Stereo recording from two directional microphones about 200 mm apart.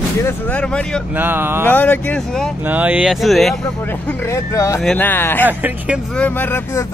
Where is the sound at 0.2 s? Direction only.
10° left (ahead or behind).